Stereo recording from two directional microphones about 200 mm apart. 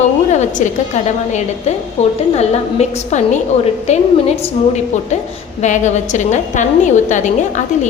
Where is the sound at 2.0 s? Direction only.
35° left (ahead or behind).